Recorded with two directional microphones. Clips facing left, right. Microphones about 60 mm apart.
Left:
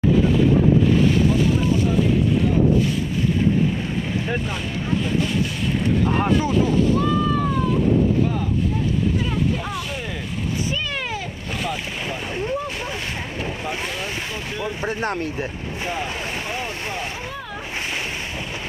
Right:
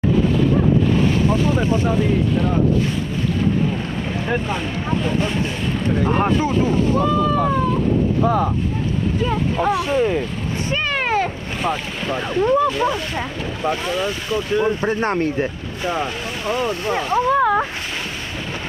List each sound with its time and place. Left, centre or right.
1.3 s speech: right
6.0 s speech: right
8.2 s speech: right
9.6 s speech: right
9.8 s speech: right
10.7 s boat: right
11.6 s speech: right